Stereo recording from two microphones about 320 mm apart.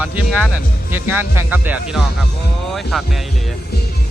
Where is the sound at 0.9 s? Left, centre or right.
Centre.